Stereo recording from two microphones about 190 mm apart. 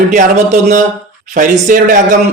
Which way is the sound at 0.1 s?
40° right (ahead or behind).